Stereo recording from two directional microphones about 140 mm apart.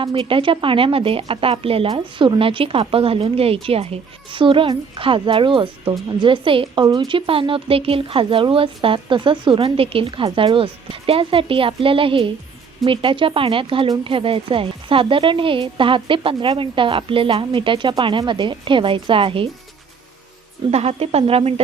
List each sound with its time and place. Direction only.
0.0 s speech: 40° right (ahead or behind)
20.7 s a woman's voice: 45° right (ahead or behind)